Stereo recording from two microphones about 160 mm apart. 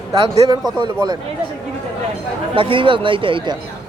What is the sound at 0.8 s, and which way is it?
Speech, 25° right (ahead or behind).